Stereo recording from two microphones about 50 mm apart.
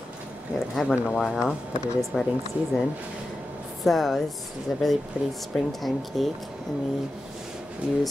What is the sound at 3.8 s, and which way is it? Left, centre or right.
Speech, centre.